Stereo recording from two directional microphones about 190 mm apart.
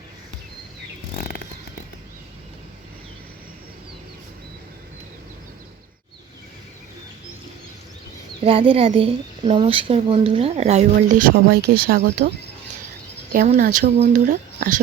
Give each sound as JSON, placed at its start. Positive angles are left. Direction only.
{"t": 8.4, "sound": "a woman's voice", "side_deg": -30}
{"t": 11.3, "sound": "speech", "side_deg": -50}
{"t": 13.3, "sound": "speech", "side_deg": -45}